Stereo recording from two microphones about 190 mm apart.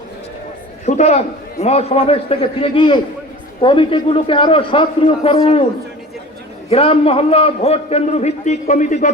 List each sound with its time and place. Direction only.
0.9 s a man's voice: 35° left (ahead or behind)
6.7 s a man's voice: 30° left (ahead or behind)